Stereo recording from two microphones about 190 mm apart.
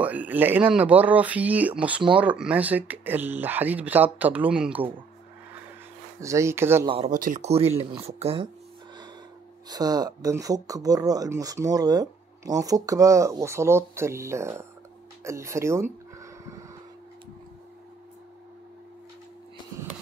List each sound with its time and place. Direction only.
0.0 s speech: 10° right (ahead or behind)
6.2 s speech: 15° right (ahead or behind)
6.9 s speech: 30° right (ahead or behind)
7.2 s speech: 40° right (ahead or behind)
9.7 s speech: 20° right (ahead or behind)
15.2 s a sound: 15° right (ahead or behind)